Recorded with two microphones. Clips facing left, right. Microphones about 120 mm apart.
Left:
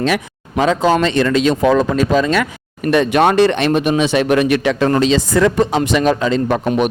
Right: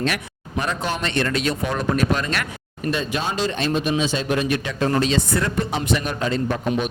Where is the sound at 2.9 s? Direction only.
70° left (ahead or behind); by 6.6 s 90° left.